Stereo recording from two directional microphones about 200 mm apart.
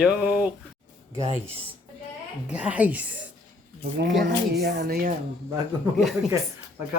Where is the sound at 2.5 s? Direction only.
5° right (ahead or behind).